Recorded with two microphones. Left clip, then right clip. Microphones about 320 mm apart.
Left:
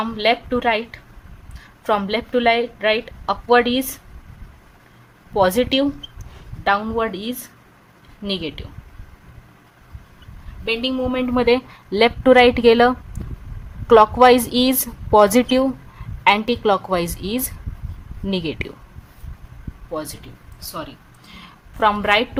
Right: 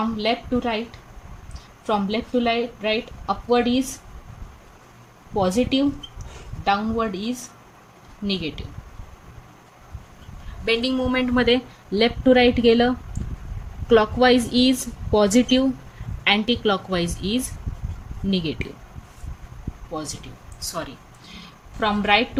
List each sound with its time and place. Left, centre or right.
0.6 s a woman's voice: left
5.4 s a woman's voice: left
10.7 s a woman's voice: centre
19.9 s a woman's voice: left
21.2 s a sound: centre